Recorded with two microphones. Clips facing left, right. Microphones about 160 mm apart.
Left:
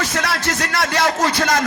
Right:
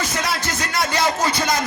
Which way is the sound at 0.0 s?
80° left.